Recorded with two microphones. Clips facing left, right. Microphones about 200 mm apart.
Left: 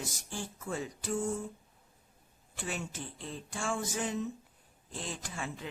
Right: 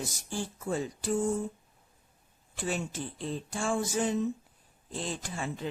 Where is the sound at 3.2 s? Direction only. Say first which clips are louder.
Right 5 dB; 35° right (ahead or behind).